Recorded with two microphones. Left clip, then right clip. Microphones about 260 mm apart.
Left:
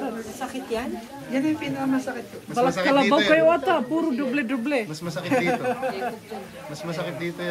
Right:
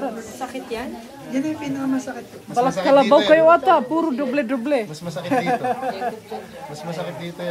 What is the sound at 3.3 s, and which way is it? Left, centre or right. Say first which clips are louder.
Speech: right 5 dB; right.